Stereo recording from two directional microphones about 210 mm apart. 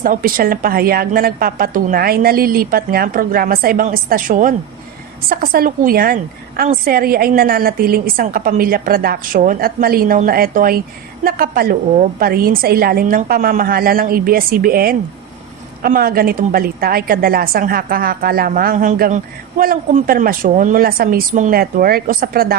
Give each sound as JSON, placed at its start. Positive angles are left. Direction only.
{"t": 0.0, "sound": "a woman's voice", "side_deg": -40}